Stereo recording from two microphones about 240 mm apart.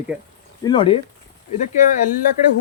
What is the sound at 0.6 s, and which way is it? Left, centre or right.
Speech, left.